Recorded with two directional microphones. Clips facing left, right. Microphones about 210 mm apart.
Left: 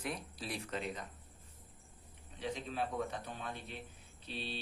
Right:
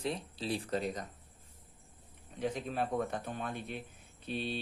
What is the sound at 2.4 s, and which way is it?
A man's voice, 50° right (ahead or behind).